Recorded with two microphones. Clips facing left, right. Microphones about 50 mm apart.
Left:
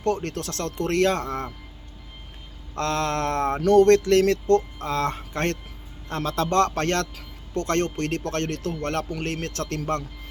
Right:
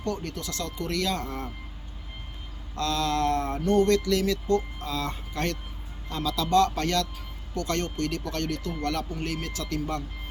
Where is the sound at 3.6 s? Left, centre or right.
Left.